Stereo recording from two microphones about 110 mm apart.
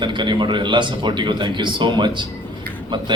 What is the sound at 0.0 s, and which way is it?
A man's voice, 45° right (ahead or behind).